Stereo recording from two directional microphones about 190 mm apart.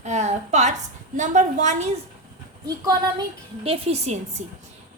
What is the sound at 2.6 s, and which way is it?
Speech, 20° right (ahead or behind).